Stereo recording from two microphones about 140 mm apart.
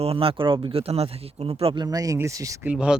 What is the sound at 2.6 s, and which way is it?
Speech, 5° right (ahead or behind).